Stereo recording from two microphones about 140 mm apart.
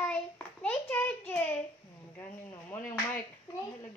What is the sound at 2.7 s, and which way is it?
Speech, 10° left (ahead or behind).